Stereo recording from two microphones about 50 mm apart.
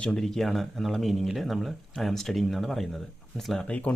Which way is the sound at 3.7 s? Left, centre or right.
Left.